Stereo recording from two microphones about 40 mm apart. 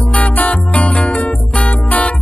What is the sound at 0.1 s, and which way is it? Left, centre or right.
Music, left.